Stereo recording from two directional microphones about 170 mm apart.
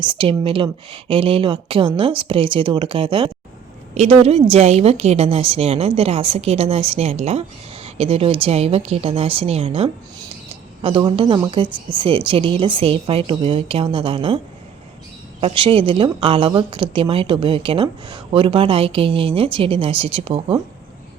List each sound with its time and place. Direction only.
0.0 s a woman's voice: 30° right (ahead or behind)